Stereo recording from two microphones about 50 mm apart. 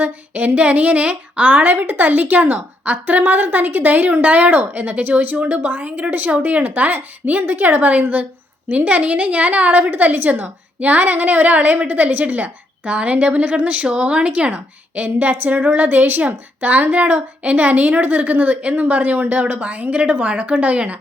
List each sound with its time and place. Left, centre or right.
0.0 s a woman's voice: right